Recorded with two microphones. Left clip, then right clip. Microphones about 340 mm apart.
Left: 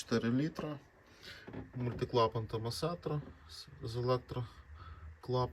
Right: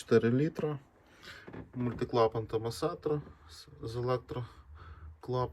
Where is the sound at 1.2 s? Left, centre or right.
Centre.